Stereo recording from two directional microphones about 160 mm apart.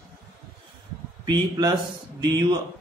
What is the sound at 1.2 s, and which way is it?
A man's voice, 25° right (ahead or behind).